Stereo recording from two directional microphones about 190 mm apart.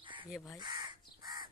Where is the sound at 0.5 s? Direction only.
20° right (ahead or behind).